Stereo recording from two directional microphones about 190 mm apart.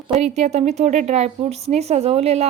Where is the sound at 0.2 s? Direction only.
35° right (ahead or behind).